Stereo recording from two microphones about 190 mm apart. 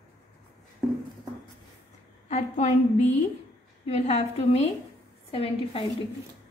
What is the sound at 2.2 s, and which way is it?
Speech, 35° left (ahead or behind).